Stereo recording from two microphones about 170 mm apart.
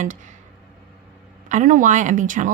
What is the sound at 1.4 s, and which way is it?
A woman's voice, 50° right (ahead or behind).